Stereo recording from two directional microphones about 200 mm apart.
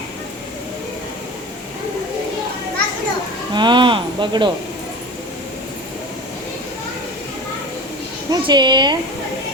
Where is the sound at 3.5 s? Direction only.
25° right (ahead or behind).